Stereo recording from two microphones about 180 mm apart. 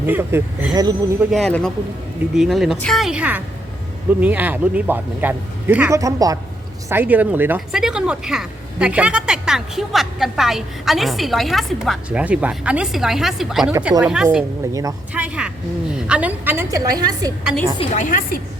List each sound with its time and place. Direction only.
0.0 s a man's voice: 10° right (ahead or behind)
1.3 s a man's voice: 5° left (ahead or behind)
14.7 s a woman's voice: 20° right (ahead or behind)
15.1 s a man's voice: 5° right (ahead or behind)
17.7 s a woman's voice: 45° left (ahead or behind)